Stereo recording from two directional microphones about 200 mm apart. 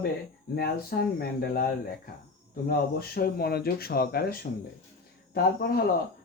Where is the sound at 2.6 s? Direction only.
50° left (ahead or behind).